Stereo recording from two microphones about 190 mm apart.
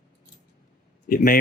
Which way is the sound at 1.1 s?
45° left (ahead or behind).